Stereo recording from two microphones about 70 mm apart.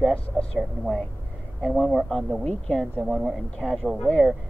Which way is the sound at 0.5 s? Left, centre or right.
Centre.